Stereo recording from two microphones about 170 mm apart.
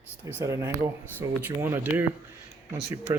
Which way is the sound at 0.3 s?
15° right (ahead or behind).